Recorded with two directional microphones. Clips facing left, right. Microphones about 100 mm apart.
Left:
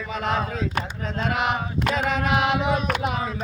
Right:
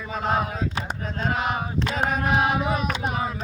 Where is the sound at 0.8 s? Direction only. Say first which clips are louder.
Left 2 dB; 80° left.